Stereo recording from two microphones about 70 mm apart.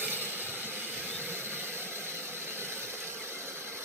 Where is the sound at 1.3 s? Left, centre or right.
Right.